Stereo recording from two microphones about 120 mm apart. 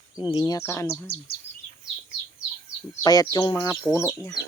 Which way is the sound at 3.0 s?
35° left (ahead or behind).